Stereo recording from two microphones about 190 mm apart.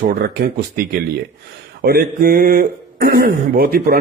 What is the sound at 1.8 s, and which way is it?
Speech, 50° right (ahead or behind).